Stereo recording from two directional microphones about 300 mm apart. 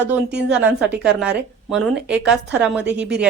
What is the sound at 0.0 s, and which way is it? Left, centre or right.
Speech, right.